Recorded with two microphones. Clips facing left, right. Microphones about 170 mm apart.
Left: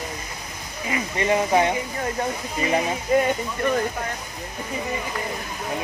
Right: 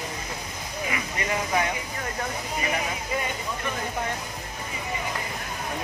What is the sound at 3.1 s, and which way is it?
Speech, 45° left (ahead or behind).